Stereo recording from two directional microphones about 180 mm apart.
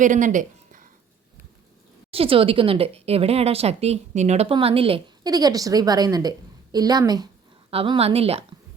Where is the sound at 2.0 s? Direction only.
30° right (ahead or behind).